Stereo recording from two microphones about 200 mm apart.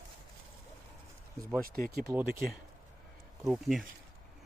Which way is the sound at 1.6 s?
45° right (ahead or behind).